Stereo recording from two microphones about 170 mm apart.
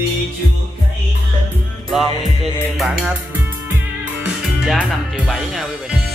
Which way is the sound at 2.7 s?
5° right (ahead or behind).